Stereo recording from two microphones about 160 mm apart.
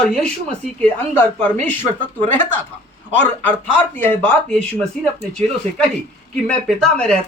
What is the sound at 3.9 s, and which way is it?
Speech, 10° left (ahead or behind).